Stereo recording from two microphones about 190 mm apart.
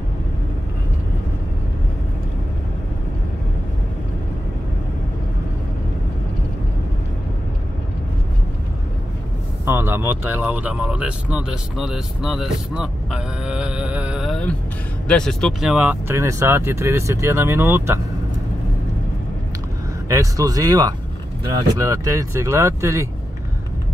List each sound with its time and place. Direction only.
9.7 s speech: 10° right (ahead or behind)
20.1 s speech: 15° right (ahead or behind)